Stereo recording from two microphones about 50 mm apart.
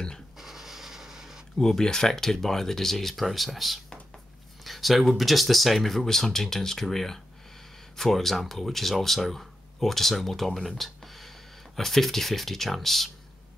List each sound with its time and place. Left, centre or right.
0.4 s scratch: centre
1.6 s speech: centre
11.7 s speech: centre